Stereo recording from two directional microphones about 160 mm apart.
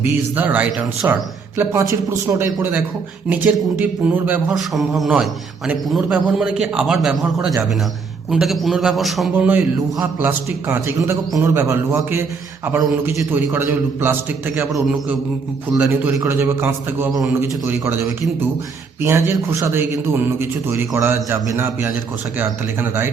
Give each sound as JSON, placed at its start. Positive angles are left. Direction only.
{"t": 0.0, "sound": "a man's voice", "side_deg": -10}
{"t": 4.5, "sound": "a man's voice", "side_deg": 0}
{"t": 8.3, "sound": "a man's voice", "side_deg": 0}
{"t": 9.3, "sound": "a man's voice", "side_deg": -10}
{"t": 15.9, "sound": "a man's voice", "side_deg": -10}